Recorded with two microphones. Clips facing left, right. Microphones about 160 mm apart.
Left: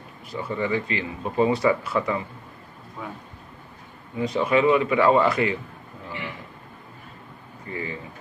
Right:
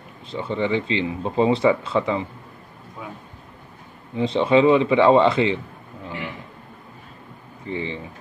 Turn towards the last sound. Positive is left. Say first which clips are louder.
# right 4 dB
turn(degrees=-25)  # may be behind; listen again after turning